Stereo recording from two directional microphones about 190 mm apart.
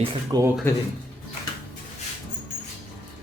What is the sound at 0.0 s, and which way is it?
Speech, 30° right (ahead or behind).